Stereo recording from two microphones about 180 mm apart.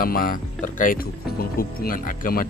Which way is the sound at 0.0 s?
50° left (ahead or behind).